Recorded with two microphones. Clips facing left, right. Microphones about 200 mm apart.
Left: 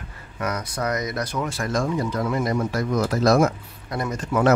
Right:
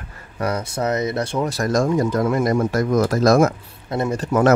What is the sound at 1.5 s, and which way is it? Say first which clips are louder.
Speech: right 7 dB; 40° right (ahead or behind).